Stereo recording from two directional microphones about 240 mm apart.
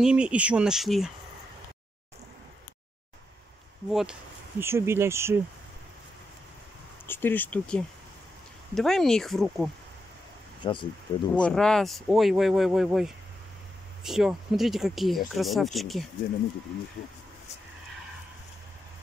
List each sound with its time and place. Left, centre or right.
0.0 s speech: centre
3.9 s speech: centre
7.1 s speech: centre
10.6 s speech: left
11.3 s speech: centre